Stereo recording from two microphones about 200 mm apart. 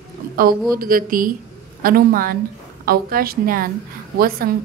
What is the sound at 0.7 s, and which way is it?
A woman's voice, 45° right (ahead or behind).